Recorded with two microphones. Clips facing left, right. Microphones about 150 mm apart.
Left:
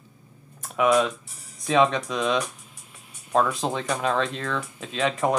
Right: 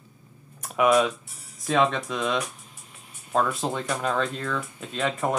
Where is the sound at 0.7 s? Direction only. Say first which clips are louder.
Even; centre (ahead or behind).